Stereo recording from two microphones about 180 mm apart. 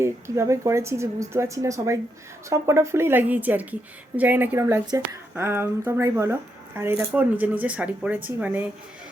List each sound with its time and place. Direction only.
0.0 s a woman's voice: 15° right (ahead or behind)